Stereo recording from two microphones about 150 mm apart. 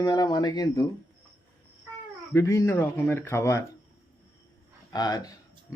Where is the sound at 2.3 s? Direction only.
20° left (ahead or behind).